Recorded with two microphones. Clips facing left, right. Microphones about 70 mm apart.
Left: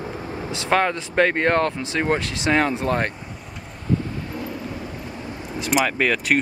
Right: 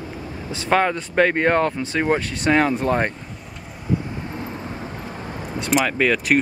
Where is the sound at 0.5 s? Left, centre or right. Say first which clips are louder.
Right 2 dB; centre.